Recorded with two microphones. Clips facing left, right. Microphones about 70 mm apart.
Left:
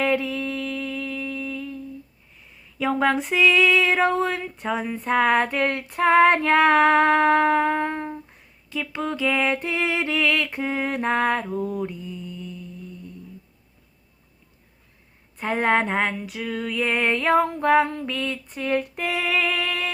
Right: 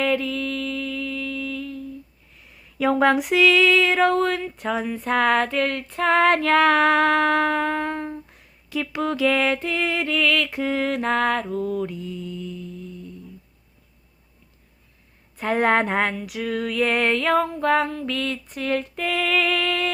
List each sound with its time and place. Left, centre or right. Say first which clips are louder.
0.0 s a sound: even; centre
2.9 s female singing: right 3 dB; centre
5.5 s mantra: even; centre
9.2 s mantra: right 2 dB; centre
10.4 s mantra: right 2 dB; centre
15.4 s female singing: right 2 dB; centre
18.0 s mantra: right 1 dB; centre